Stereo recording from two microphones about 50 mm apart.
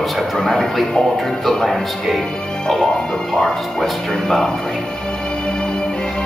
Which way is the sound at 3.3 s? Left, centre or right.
Centre.